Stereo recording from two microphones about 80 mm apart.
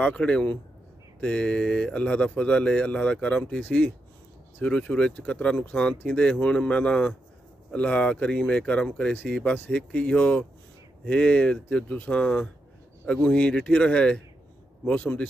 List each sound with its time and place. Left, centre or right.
0.0 s speech: centre